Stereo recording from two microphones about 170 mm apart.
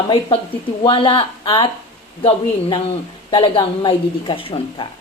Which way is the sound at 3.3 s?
30° left (ahead or behind).